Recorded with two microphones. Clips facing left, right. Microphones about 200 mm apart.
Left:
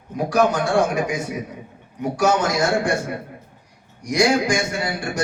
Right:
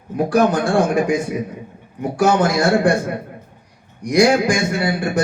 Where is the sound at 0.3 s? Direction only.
55° right (ahead or behind).